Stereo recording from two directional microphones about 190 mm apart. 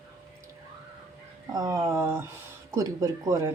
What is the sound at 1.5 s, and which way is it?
Speech, 20° right (ahead or behind).